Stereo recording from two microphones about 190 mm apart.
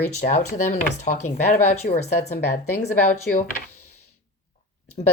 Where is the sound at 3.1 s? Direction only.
45° left (ahead or behind).